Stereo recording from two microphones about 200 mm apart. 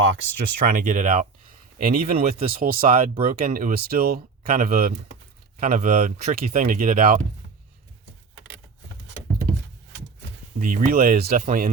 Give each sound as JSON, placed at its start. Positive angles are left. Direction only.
{"t": 0.0, "sound": "speech", "side_deg": -75}
{"t": 0.7, "sound": "speech", "side_deg": -40}
{"t": 10.6, "sound": "speech", "side_deg": -45}